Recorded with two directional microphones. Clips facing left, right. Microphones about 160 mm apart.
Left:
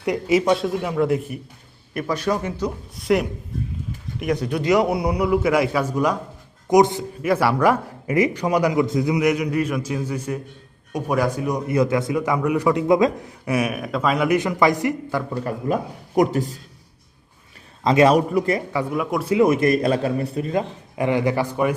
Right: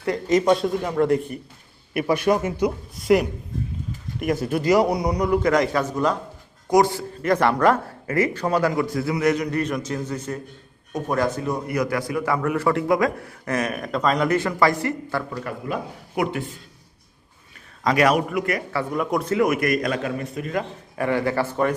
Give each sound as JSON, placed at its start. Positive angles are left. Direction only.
{"t": 0.0, "sound": "a man's voice", "side_deg": 10}
{"t": 1.9, "sound": "speech", "side_deg": -10}
{"t": 2.9, "sound": "a man's voice", "side_deg": 0}
{"t": 7.3, "sound": "a man's voice", "side_deg": 10}
{"t": 14.3, "sound": "a man's voice", "side_deg": 15}
{"t": 15.4, "sound": "speech", "side_deg": 40}
{"t": 17.8, "sound": "a man's voice", "side_deg": 25}
{"t": 18.7, "sound": "a man's voice", "side_deg": 15}
{"t": 18.9, "sound": "a man's voice", "side_deg": 5}
{"t": 19.3, "sound": "a man's voice", "side_deg": 25}